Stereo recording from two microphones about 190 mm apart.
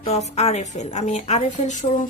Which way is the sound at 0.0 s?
35° left (ahead or behind).